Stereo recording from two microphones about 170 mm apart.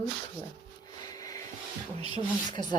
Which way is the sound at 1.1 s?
20° left (ahead or behind).